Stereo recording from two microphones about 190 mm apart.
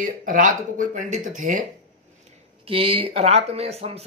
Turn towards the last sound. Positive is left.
turn(degrees=-30)  # may be behind; listen again after turning